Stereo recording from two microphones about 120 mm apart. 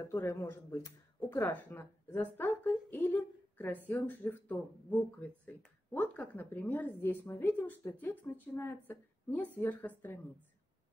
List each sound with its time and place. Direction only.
0.0 s a woman's voice: 20° left (ahead or behind)